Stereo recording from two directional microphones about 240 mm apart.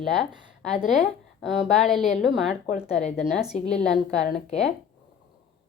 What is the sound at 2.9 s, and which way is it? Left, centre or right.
Speech, left.